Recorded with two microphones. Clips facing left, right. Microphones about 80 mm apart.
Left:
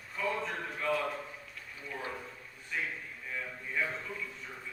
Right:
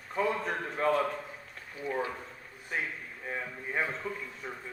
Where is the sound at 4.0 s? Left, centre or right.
Right.